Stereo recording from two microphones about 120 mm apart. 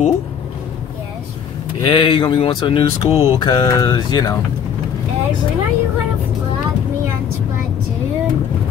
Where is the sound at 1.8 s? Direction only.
45° left (ahead or behind).